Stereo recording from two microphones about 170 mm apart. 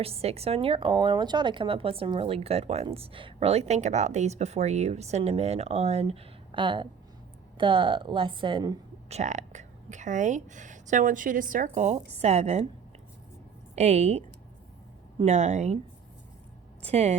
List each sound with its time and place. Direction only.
0.0 s a woman's voice: 35° right (ahead or behind)
9.0 s speech: 40° right (ahead or behind)
13.7 s speech: 40° right (ahead or behind)
16.8 s speech: 40° right (ahead or behind)